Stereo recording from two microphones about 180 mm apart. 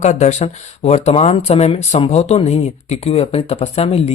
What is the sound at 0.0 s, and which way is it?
Speech, 40° left (ahead or behind).